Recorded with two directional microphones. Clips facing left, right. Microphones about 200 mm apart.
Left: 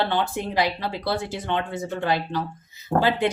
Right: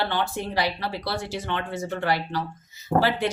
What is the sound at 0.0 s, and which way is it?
Speech, 20° left (ahead or behind).